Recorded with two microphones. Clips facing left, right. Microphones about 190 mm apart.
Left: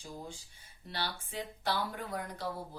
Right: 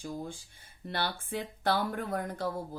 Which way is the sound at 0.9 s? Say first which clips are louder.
Right 5 dB; 55° right (ahead or behind).